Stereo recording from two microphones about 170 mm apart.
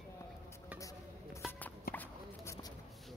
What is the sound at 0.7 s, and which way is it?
Music, 20° left (ahead or behind).